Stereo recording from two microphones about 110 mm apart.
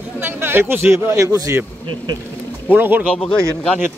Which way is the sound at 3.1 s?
5° left (ahead or behind).